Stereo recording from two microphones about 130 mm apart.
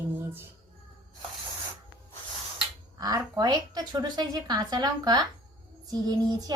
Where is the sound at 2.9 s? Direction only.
30° right (ahead or behind).